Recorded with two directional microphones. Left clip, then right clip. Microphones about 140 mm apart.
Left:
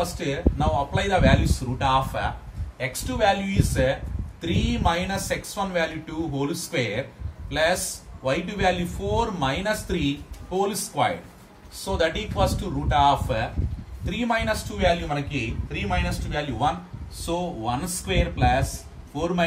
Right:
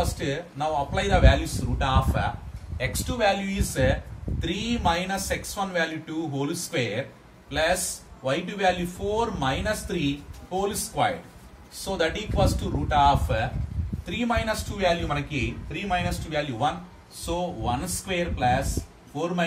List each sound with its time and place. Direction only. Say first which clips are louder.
0.0 s speech: left 3 dB; 25° right (ahead or behind)
2.8 s a man's voice: left 1 dB; 30° right (ahead or behind)